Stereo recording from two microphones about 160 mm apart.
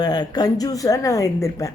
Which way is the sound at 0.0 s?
25° left (ahead or behind).